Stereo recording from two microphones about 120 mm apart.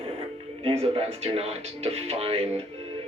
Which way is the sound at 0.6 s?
60° right (ahead or behind).